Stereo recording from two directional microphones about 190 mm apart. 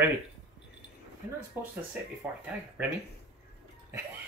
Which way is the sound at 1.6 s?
10° right (ahead or behind).